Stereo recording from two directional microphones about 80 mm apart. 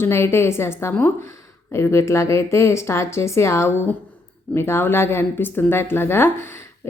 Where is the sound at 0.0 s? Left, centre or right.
Left.